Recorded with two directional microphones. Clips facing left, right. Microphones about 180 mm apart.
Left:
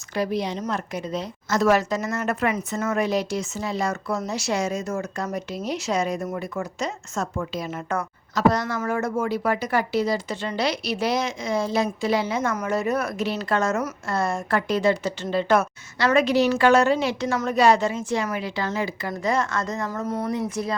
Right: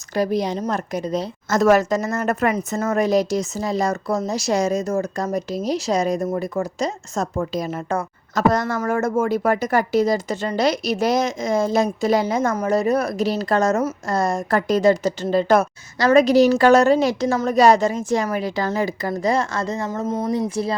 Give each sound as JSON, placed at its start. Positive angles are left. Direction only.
{"t": 0.1, "sound": "speech", "side_deg": -40}
{"t": 8.4, "sound": "speech", "side_deg": -50}